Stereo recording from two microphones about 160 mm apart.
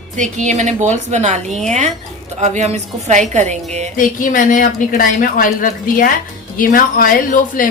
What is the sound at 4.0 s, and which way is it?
A woman's voice, 55° left (ahead or behind).